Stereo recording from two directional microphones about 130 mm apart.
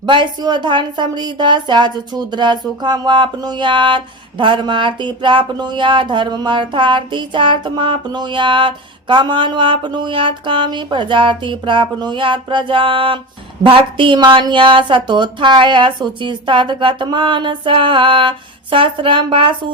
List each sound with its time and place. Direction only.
0.0 s a woman's voice: 35° right (ahead or behind)